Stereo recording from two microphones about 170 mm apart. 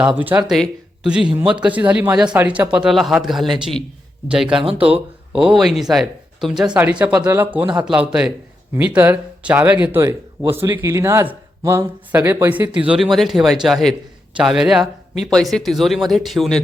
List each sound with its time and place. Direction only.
0.2 s speech: 10° right (ahead or behind)